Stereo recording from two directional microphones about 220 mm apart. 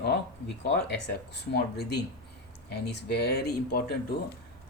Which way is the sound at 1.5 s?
50° left (ahead or behind).